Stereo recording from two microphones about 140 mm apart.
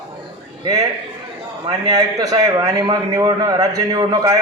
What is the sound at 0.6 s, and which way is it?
A man's voice, 25° right (ahead or behind).